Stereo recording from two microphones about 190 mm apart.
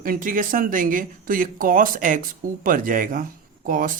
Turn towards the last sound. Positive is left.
turn(degrees=-45)  # may be behind; listen again after turning